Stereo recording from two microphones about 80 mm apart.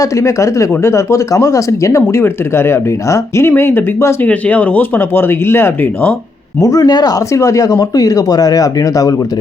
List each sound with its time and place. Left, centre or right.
0.0 s speech: left
2.2 s speech: left
6.6 s speech: left
7.3 s speech: left